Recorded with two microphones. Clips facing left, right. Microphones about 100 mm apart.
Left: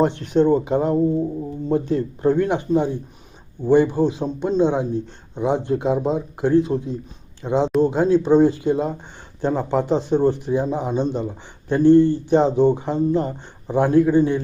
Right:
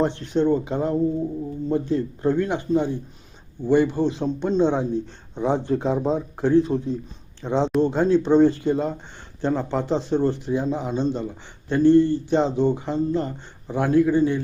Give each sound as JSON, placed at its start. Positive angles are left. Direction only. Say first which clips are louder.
{"t": 0.0, "sound": "a man's voice", "louder": "left 4 dB", "side_deg": 15}